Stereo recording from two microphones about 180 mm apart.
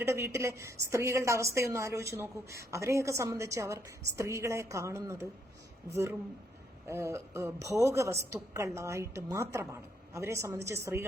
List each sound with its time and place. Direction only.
0.0 s a woman's voice: 15° right (ahead or behind)